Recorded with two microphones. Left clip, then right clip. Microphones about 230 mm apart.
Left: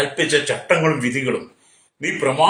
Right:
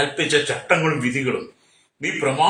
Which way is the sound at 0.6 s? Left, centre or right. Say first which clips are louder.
Left 2 dB; centre.